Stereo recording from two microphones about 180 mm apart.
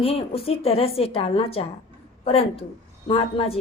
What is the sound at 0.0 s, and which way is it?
A woman's voice, 35° left (ahead or behind).